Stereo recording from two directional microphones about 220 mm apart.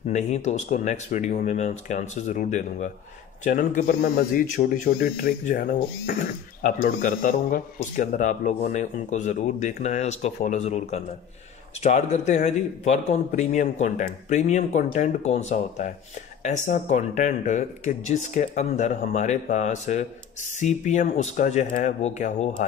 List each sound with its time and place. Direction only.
0.1 s speech: 30° left (ahead or behind)